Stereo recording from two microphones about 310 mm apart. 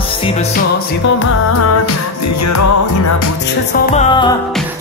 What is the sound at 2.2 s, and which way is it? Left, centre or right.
Music, left.